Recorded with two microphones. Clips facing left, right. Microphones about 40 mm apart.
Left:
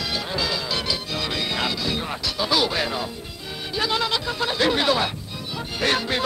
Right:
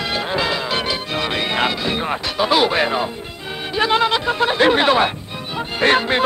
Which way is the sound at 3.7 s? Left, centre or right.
Right.